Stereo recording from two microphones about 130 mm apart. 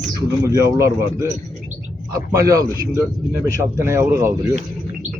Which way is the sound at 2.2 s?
25° right (ahead or behind).